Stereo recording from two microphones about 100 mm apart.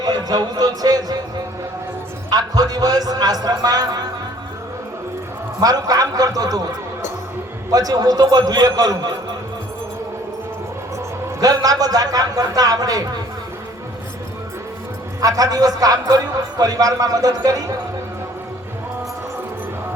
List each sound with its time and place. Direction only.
0.0 s a man's voice: 40° right (ahead or behind)
2.3 s a man's voice: 40° right (ahead or behind)
5.5 s a man's voice: 40° right (ahead or behind)
7.7 s a man's voice: 40° right (ahead or behind)
11.3 s a man's voice: 40° right (ahead or behind)
15.2 s a man's voice: 35° right (ahead or behind)